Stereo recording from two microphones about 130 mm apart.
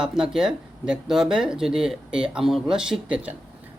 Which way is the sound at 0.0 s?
5° right (ahead or behind).